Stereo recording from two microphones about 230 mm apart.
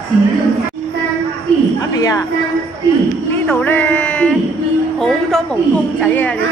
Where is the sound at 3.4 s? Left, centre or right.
Centre.